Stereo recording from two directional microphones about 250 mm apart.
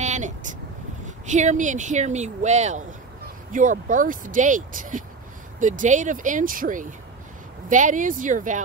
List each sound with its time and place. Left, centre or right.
0.0 s vehicle: right
1.0 s speech: right